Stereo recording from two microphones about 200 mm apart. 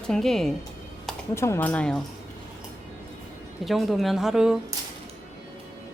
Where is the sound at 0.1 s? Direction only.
Centre (ahead or behind).